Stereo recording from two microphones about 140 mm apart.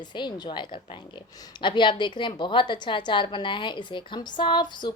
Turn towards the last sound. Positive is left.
turn(degrees=35)  # may be behind; listen again after turning